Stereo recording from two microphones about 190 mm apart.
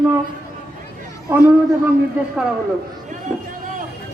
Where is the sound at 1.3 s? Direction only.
10° right (ahead or behind).